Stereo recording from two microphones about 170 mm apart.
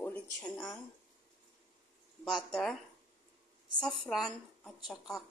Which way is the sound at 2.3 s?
Centre (ahead or behind).